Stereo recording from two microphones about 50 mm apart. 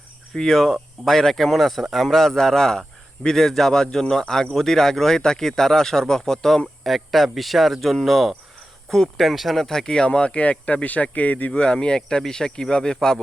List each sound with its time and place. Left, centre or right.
0.3 s speech: centre; by 11.6 s left
11.6 s speech: centre